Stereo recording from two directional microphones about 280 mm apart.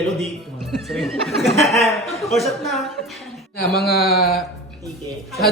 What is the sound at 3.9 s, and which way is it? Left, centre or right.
Speech, left.